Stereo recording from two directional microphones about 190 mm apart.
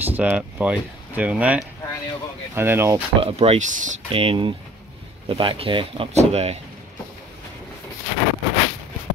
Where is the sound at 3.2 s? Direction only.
30° right (ahead or behind).